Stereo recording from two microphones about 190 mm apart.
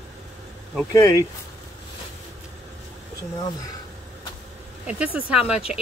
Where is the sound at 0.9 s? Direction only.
15° left (ahead or behind).